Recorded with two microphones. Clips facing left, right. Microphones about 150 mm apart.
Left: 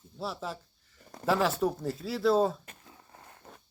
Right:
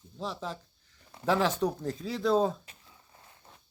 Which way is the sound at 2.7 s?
60° left (ahead or behind).